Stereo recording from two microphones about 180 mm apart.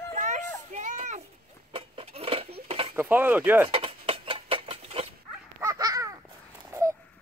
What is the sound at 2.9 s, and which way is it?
Speech, 10° right (ahead or behind).